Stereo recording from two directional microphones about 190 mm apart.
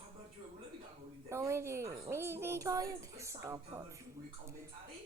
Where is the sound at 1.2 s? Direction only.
15° right (ahead or behind).